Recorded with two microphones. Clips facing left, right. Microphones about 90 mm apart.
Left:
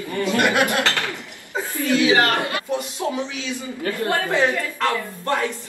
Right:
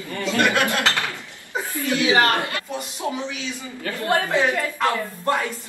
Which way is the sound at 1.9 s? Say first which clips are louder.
Left 1 dB; 20° right (ahead or behind).